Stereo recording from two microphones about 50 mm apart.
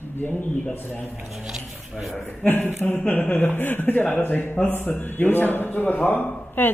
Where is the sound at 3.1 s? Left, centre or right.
Left.